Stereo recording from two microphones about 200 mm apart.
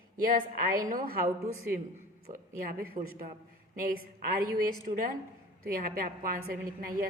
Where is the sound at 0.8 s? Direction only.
45° right (ahead or behind).